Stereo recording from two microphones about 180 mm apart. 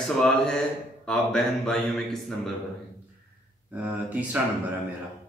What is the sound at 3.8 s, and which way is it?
Speech, 10° right (ahead or behind).